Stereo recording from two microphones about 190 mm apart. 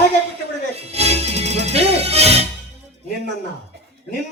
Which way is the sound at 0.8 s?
35° right (ahead or behind).